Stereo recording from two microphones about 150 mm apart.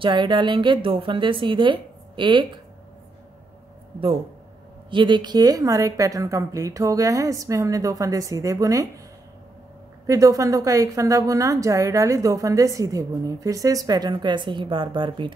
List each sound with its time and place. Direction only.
0.0 s a woman's voice: 35° right (ahead or behind)
4.9 s a woman's voice: 30° right (ahead or behind)
10.0 s a woman's voice: 20° right (ahead or behind)